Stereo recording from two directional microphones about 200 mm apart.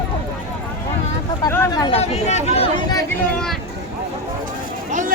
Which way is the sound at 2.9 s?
15° left (ahead or behind).